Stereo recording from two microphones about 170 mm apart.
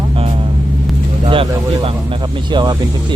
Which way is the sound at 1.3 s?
30° right (ahead or behind).